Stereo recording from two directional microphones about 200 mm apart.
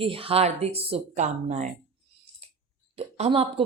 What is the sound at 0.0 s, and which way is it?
A woman's voice, 25° right (ahead or behind).